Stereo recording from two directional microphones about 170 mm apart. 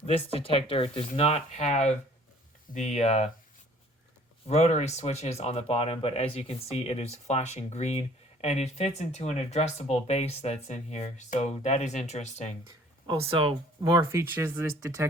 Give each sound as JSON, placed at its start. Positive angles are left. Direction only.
{"t": 0.3, "sound": "speech", "side_deg": 35}
{"t": 4.4, "sound": "speech", "side_deg": 40}
{"t": 13.1, "sound": "speech", "side_deg": -30}